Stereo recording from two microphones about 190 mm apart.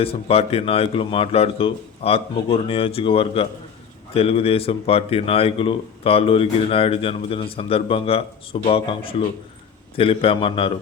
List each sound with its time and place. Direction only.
0.0 s a man's voice: 30° left (ahead or behind)